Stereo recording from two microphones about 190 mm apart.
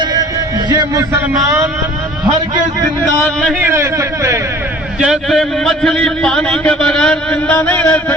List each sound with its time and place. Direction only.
0.0 s music: 20° right (ahead or behind)
0.7 s a man's voice: 20° right (ahead or behind)
3.2 s a man's voice: 5° left (ahead or behind)
3.6 s a man's voice: 15° right (ahead or behind)
4.9 s a man's voice: 5° right (ahead or behind)